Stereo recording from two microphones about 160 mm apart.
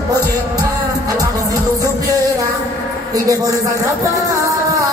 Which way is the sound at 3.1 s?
20° right (ahead or behind).